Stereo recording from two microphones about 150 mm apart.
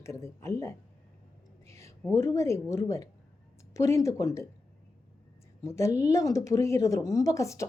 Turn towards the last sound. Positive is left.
turn(degrees=20)  # may be behind; listen again after turning